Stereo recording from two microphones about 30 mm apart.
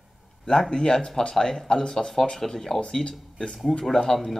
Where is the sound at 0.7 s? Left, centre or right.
Left.